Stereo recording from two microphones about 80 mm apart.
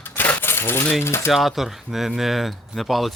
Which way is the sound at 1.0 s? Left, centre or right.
Left.